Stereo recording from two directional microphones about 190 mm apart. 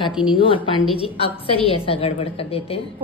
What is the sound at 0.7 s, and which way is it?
A woman's voice, 30° left (ahead or behind).